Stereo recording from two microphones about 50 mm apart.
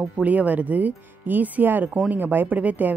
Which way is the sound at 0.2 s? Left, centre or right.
Right.